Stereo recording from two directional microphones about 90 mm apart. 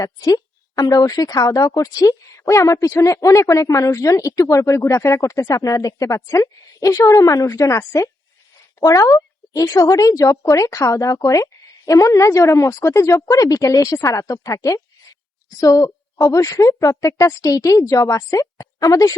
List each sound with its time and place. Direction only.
0.0 s a woman's voice: 45° left (ahead or behind)